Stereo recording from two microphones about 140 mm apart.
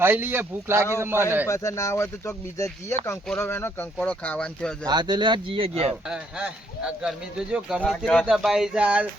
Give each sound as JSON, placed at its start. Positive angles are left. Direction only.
{"t": 0.0, "sound": "speech", "side_deg": -15}
{"t": 1.5, "sound": "speech", "side_deg": 20}
{"t": 4.9, "sound": "speech", "side_deg": -30}
{"t": 6.1, "sound": "speech", "side_deg": -5}
{"t": 7.8, "sound": "speech", "side_deg": 10}